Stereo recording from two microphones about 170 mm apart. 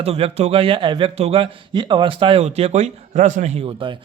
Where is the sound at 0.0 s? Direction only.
35° right (ahead or behind).